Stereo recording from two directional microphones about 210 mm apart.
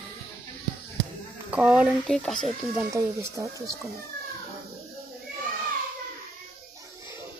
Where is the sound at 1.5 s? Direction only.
5° right (ahead or behind).